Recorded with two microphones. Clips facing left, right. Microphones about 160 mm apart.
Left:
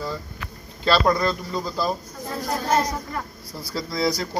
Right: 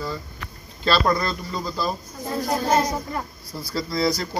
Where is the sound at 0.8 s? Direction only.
10° left (ahead or behind).